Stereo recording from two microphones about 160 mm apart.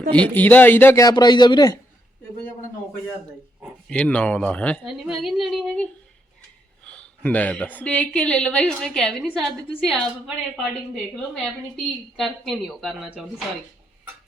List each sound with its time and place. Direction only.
0.1 s a man's voice: 10° left (ahead or behind)
3.8 s a woman's voice: 5° left (ahead or behind)
4.9 s a woman's voice: 5° right (ahead or behind)
12.1 s a woman's voice: centre (ahead or behind)